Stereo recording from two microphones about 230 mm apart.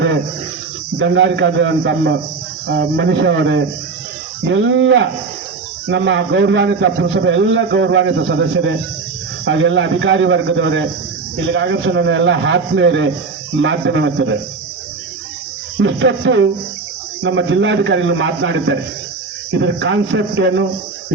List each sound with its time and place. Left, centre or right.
0.9 s a man's voice: right
15.8 s a man's voice: right